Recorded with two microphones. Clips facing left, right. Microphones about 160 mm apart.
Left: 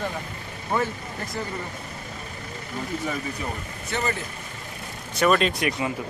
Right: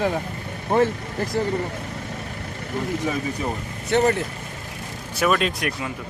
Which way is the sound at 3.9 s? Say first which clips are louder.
Right 9 dB; 60° right (ahead or behind).